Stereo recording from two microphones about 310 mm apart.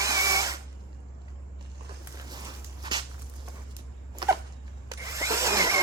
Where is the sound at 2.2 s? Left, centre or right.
Centre.